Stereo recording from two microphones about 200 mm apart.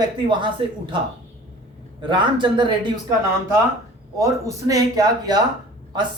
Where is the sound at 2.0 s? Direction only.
25° right (ahead or behind).